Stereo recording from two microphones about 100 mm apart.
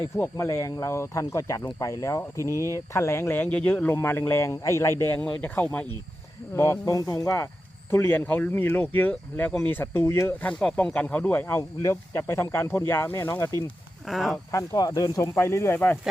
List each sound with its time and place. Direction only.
0.3 s speech: 35° left (ahead or behind)
2.6 s speech: 30° right (ahead or behind)
2.9 s speech: 30° left (ahead or behind)
5.4 s speech: 15° left (ahead or behind)
6.5 s speech: 30° left (ahead or behind)
10.4 s speech: 10° left (ahead or behind); by 13.5 s 30° left (ahead or behind)
14.1 s speech: centre (ahead or behind)
14.8 s speech: 40° left (ahead or behind); by 16.0 s 20° left (ahead or behind)